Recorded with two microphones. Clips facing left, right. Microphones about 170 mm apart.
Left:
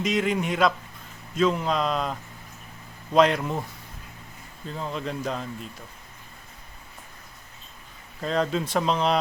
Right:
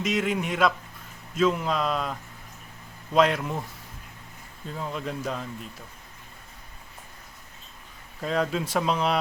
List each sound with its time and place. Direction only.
0.0 s speech: 5° right (ahead or behind)
3.2 s speech: centre (ahead or behind)
4.8 s speech: 5° right (ahead or behind)
8.2 s speech: 5° right (ahead or behind)